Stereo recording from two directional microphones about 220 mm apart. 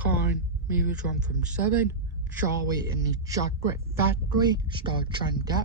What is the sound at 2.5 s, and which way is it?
Speech, 15° right (ahead or behind).